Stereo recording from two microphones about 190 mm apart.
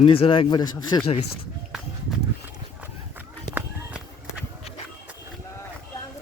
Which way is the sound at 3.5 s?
5° right (ahead or behind).